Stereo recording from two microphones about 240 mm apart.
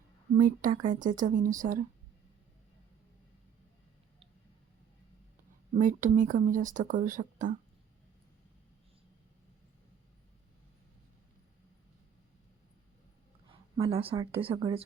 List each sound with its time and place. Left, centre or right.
0.3 s speech: right
5.7 s speech: right
13.5 s speech: centre